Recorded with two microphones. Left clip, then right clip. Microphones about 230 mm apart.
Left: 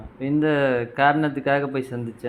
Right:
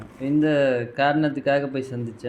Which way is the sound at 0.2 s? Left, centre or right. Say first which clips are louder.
Even; left.